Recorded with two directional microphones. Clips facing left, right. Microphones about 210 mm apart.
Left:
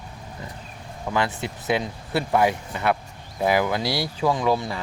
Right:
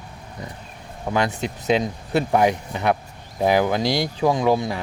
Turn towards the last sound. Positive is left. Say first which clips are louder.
# right 3 dB
turn(degrees=-15)  # may be behind; listen again after turning